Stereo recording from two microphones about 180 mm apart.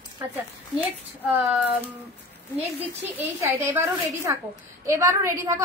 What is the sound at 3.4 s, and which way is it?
A woman's voice, 15° right (ahead or behind).